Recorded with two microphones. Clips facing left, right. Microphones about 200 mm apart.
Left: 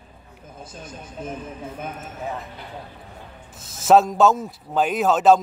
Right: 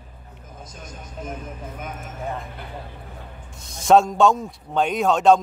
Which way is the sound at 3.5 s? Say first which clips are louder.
Even; 5° left (ahead or behind).